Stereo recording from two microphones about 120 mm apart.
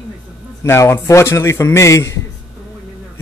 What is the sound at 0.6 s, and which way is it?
Speech, 20° left (ahead or behind).